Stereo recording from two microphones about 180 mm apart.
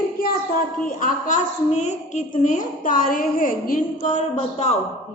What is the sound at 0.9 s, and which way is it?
A woman's voice, 45° left (ahead or behind).